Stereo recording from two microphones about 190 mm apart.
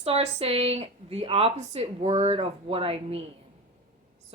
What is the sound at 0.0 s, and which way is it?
Speech, 30° right (ahead or behind).